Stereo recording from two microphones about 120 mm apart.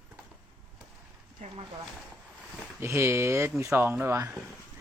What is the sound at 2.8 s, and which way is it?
Speech, 20° right (ahead or behind).